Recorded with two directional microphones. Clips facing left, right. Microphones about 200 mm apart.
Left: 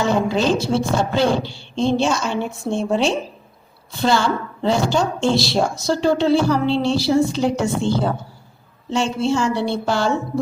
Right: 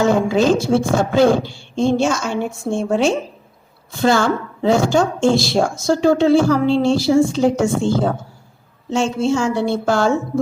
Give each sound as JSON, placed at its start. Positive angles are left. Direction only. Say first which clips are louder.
{"t": 0.0, "sound": "a woman's voice", "louder": "right 3 dB", "side_deg": -50}